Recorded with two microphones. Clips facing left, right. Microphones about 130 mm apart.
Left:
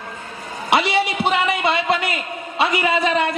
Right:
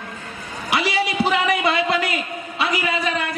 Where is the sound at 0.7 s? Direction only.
25° left (ahead or behind).